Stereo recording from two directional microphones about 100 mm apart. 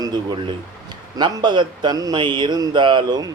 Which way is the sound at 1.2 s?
50° right (ahead or behind).